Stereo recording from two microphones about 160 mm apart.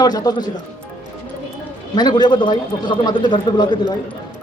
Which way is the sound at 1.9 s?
25° left (ahead or behind).